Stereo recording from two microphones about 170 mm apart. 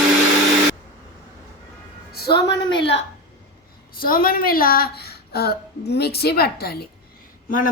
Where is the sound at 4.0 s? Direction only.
60° left (ahead or behind).